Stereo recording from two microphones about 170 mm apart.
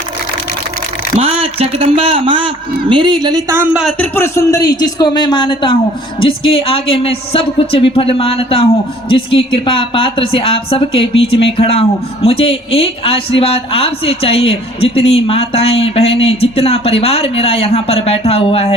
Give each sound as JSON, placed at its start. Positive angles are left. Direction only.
{"t": 1.2, "sound": "a man's voice", "side_deg": -35}
{"t": 3.6, "sound": "a man's voice", "side_deg": -5}
{"t": 3.9, "sound": "a man's voice", "side_deg": 10}